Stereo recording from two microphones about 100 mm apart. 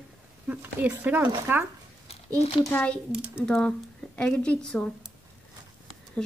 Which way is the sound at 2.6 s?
20° left (ahead or behind).